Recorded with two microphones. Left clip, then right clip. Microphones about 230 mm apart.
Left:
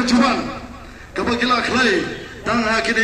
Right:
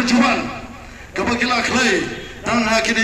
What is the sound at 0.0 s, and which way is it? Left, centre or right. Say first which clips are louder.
A man's voice: right 1 dB; right.